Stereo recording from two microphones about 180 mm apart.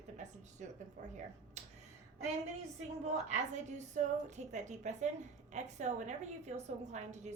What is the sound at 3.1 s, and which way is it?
A woman's voice, 40° right (ahead or behind).